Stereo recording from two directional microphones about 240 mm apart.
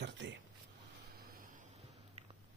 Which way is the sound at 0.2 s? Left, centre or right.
Right.